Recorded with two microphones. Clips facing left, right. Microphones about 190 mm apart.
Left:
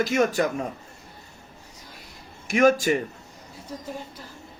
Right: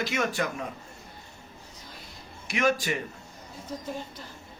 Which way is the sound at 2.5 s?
45° left (ahead or behind).